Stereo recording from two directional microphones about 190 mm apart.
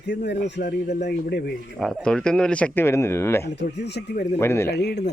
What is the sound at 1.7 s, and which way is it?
Speech, 5° left (ahead or behind).